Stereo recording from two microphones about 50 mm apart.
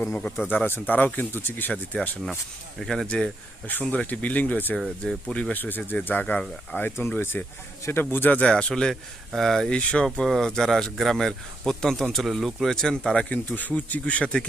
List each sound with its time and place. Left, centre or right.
0.5 s speech: left
1.9 s speech: left
2.7 s speech: centre
3.7 s speech: left
5.0 s speech: centre
5.5 s speech: left
6.7 s speech: left
8.2 s speech: left
8.4 s speech: centre
9.6 s speech: centre
12.7 s speech: centre
13.3 s speech: left